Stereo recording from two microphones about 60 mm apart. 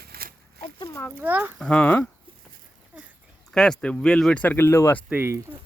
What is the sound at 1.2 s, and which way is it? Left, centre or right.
Speech, right.